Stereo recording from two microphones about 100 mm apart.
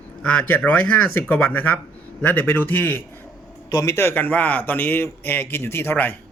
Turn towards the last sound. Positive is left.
turn(degrees=20)  # may be behind; listen again after turning